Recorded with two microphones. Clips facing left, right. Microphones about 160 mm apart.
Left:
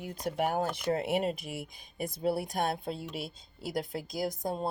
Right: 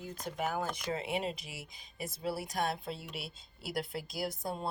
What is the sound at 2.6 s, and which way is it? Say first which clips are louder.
A woman's voice: left 3 dB; 50° left (ahead or behind).